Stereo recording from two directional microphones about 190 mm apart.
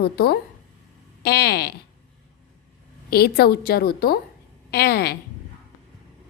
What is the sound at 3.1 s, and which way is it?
A woman's voice, 55° left (ahead or behind).